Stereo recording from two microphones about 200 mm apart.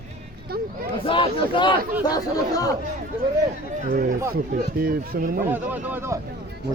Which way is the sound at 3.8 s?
45° right (ahead or behind).